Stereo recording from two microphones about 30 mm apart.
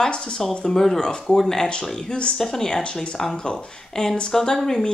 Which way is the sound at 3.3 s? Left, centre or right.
Left.